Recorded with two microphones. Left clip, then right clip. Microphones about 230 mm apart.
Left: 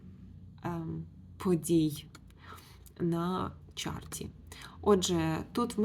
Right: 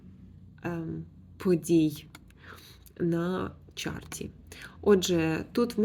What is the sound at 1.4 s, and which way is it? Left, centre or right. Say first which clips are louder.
Speech: right 4 dB; centre.